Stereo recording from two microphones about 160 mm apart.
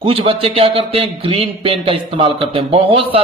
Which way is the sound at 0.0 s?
35° right (ahead or behind).